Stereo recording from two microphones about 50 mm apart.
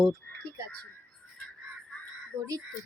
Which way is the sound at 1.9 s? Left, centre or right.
Left.